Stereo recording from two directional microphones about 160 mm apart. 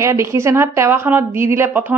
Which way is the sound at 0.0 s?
20° right (ahead or behind).